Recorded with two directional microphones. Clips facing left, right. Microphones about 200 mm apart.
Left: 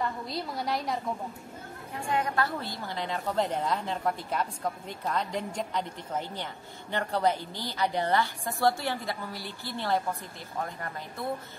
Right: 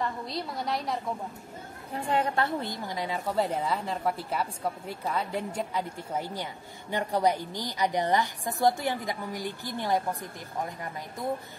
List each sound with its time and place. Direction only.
0.0 s a woman's voice: centre (ahead or behind)
2.0 s a woman's voice: 30° right (ahead or behind); by 11.2 s 15° right (ahead or behind)